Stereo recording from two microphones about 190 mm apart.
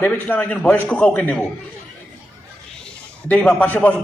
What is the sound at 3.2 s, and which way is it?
Speech, 5° left (ahead or behind).